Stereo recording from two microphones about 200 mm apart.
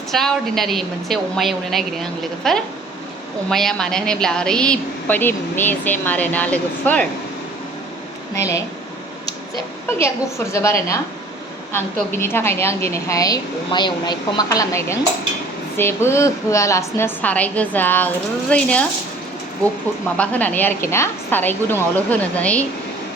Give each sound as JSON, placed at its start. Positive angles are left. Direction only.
{"t": 0.1, "sound": "a woman's voice", "side_deg": 0}
{"t": 8.4, "sound": "a woman's voice", "side_deg": 15}
{"t": 10.0, "sound": "a woman's voice", "side_deg": 15}
{"t": 20.1, "sound": "a woman's voice", "side_deg": 5}